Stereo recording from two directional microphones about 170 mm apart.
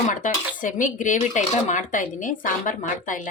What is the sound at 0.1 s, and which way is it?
A woman's voice, 50° left (ahead or behind).